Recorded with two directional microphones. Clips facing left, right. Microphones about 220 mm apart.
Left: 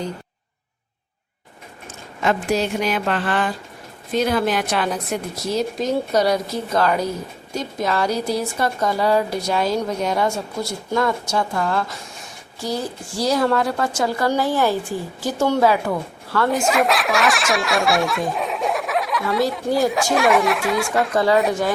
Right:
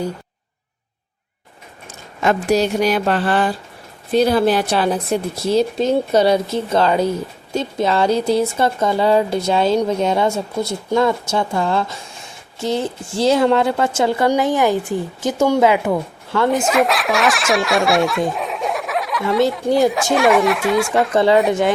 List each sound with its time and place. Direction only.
2.2 s a woman's voice: 40° right (ahead or behind); by 15.8 s 15° right (ahead or behind)
16.5 s speech: centre (ahead or behind)